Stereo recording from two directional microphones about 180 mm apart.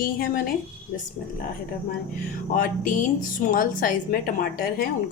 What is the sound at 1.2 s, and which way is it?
Speech, 45° left (ahead or behind).